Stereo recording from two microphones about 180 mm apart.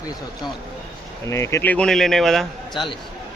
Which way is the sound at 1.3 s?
15° left (ahead or behind).